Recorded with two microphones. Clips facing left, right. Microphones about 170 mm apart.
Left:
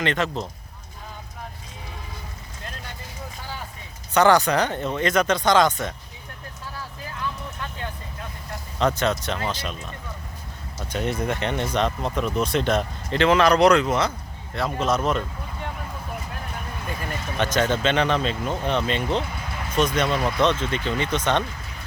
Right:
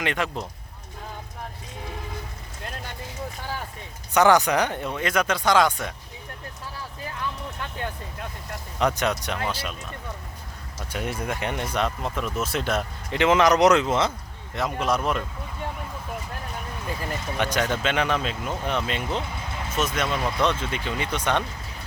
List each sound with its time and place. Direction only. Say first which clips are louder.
0.0 s speech: left 3 dB; 10° right (ahead or behind)
4.1 s speech: left 1 dB; 15° right (ahead or behind)
9.0 s speech: left 2 dB; 15° right (ahead or behind)
10.9 s speech: left 4 dB; 10° right (ahead or behind)
17.3 s speech: left 3 dB; 10° right (ahead or behind)